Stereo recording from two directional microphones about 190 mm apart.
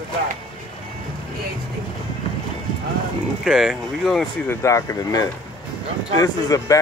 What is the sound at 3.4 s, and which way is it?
Speech, centre (ahead or behind).